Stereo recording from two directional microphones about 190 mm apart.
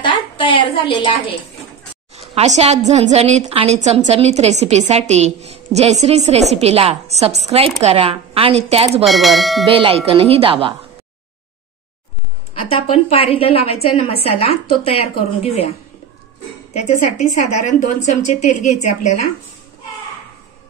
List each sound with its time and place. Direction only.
0.0 s a woman's voice: 25° left (ahead or behind)
2.1 s a woman's voice: 35° right (ahead or behind)
9.0 s speech: centre (ahead or behind)
9.7 s speech: 30° right (ahead or behind)
12.6 s a woman's voice: 30° left (ahead or behind)
16.7 s a woman's voice: 35° left (ahead or behind)